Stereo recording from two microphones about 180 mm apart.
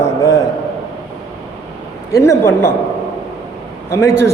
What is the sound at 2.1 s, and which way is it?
Speech, 15° left (ahead or behind).